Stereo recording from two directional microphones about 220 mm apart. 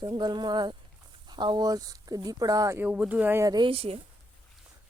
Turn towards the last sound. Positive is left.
turn(degrees=-25)  # may be behind; listen again after turning